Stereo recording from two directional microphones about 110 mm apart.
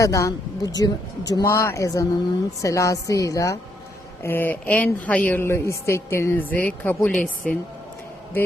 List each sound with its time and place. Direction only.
0.0 s a woman's voice: 30° left (ahead or behind)
4.2 s a woman's voice: 20° left (ahead or behind)